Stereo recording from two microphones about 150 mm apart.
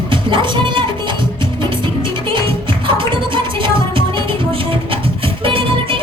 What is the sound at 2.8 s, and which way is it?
Music, 35° right (ahead or behind).